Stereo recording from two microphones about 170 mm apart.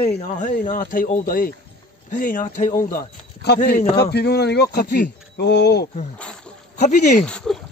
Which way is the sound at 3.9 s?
75° left (ahead or behind).